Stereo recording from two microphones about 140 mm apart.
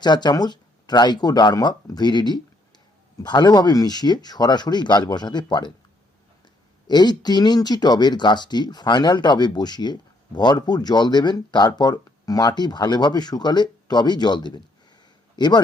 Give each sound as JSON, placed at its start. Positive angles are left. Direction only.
{"t": 0.0, "sound": "speech", "side_deg": 30}
{"t": 6.8, "sound": "speech", "side_deg": 30}